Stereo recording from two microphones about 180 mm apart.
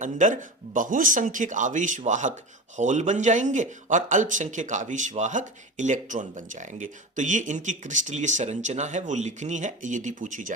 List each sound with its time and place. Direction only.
0.0 s speech: 45° right (ahead or behind)